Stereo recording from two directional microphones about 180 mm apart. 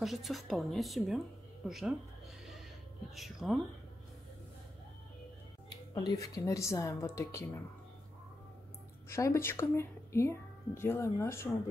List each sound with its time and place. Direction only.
0.0 s speech: centre (ahead or behind)
3.2 s speech: centre (ahead or behind)
5.9 s speech: 20° left (ahead or behind)
9.1 s speech: 15° left (ahead or behind)